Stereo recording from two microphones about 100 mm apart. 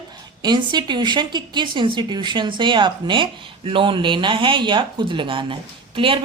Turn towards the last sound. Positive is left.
turn(degrees=-60)  # may be behind; listen again after turning